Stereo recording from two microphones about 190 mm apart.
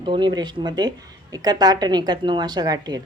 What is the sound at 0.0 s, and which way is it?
Speech, 25° right (ahead or behind).